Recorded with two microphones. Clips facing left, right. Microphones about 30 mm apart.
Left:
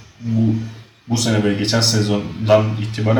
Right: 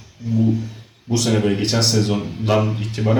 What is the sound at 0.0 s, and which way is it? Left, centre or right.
Speech, centre.